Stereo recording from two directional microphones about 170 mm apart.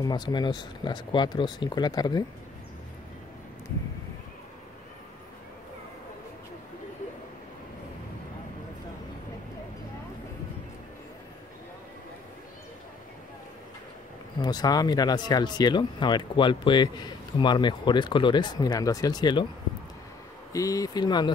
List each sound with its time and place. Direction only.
0.0 s speech: 25° left (ahead or behind)
14.4 s speech: 25° left (ahead or behind)
20.5 s speech: 20° left (ahead or behind)